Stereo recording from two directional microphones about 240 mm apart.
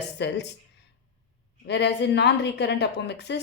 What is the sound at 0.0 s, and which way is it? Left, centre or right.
Speech, left.